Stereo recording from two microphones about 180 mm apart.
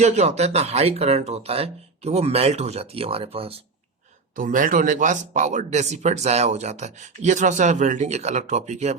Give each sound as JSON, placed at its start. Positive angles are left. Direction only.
{"t": 0.0, "sound": "speech", "side_deg": -40}
{"t": 4.4, "sound": "speech", "side_deg": -50}